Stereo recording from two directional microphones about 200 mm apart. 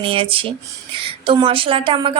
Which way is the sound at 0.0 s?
25° right (ahead or behind).